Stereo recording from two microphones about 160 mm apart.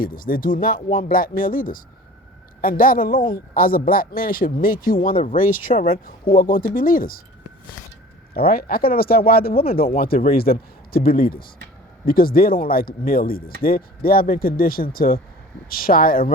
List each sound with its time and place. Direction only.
0.0 s speech: 60° left (ahead or behind)
5.7 s speech: 35° left (ahead or behind)
6.3 s speech: 60° left (ahead or behind)
8.3 s speech: 70° left (ahead or behind)